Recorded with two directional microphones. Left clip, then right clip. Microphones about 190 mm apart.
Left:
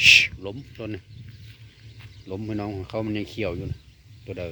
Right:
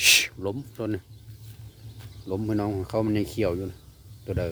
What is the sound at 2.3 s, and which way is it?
Speech, centre (ahead or behind).